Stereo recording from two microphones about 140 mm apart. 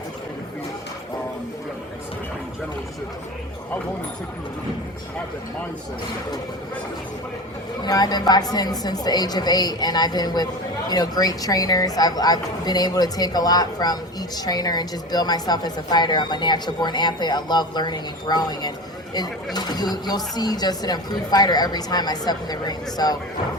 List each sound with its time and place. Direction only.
7.9 s a woman's voice: 30° left (ahead or behind)